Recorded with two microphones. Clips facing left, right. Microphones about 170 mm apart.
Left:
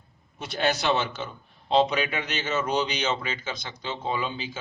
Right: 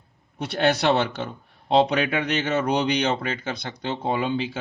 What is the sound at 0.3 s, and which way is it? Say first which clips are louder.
Speech: right 5 dB; 65° right (ahead or behind).